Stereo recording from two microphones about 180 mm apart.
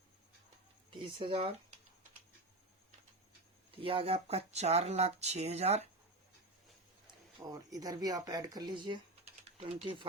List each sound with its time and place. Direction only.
0.9 s speech: 30° right (ahead or behind)
3.8 s speech: 30° right (ahead or behind)
7.3 s speech: 20° right (ahead or behind)